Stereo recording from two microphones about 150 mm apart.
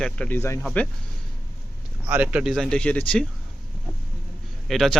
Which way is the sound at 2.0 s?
10° right (ahead or behind).